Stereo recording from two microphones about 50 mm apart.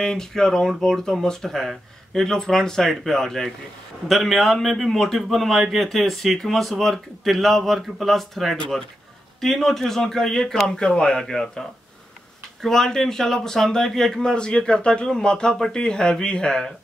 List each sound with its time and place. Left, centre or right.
0.0 s a man's voice: centre
12.6 s speech: centre